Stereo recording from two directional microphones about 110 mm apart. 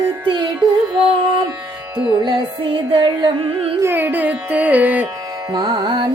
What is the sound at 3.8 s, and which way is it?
Carnatic music, 20° right (ahead or behind).